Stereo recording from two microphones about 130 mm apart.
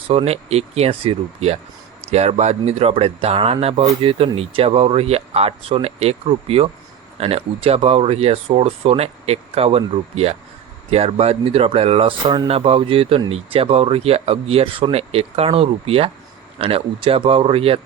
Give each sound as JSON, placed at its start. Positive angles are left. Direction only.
{"t": 0.1, "sound": "speech", "side_deg": -50}